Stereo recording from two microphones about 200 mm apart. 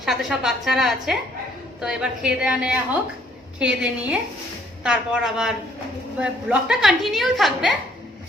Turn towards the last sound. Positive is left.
turn(degrees=0)  # may be behind; listen again after turning